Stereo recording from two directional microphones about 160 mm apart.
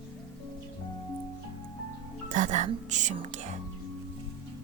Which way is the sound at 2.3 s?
50° right (ahead or behind).